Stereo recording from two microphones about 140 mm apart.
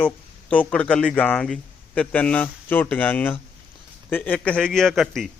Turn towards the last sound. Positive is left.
turn(degrees=0)  # may be behind; listen again after turning